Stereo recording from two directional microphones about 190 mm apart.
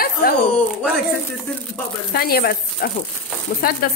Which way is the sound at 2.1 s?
55° left (ahead or behind).